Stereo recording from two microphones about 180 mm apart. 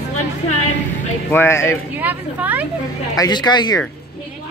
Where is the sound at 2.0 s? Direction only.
10° right (ahead or behind).